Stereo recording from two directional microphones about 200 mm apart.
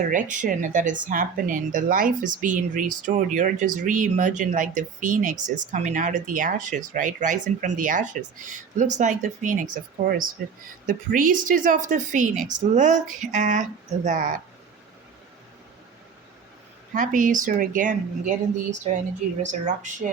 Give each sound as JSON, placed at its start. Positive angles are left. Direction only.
{"t": 0.1, "sound": "speech", "side_deg": -40}
{"t": 16.9, "sound": "speech", "side_deg": -40}
{"t": 19.5, "sound": "speech", "side_deg": -40}